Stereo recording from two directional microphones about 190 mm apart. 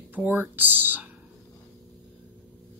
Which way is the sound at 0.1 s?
10° right (ahead or behind).